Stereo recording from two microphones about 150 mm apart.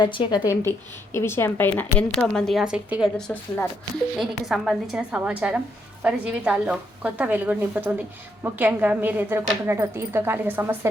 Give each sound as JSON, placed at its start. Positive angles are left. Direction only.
{"t": 0.0, "sound": "speech", "side_deg": 30}
{"t": 1.1, "sound": "a woman's voice", "side_deg": 15}
{"t": 3.2, "sound": "a woman's voice", "side_deg": 10}
{"t": 4.2, "sound": "a woman's voice", "side_deg": 0}